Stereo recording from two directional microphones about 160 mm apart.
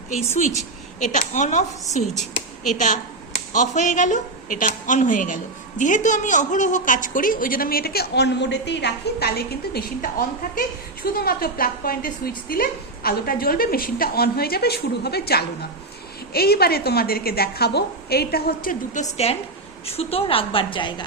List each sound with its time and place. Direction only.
0.9 s speech: 50° left (ahead or behind)
2.7 s a woman's voice: 50° left (ahead or behind); by 20.9 s 30° left (ahead or behind)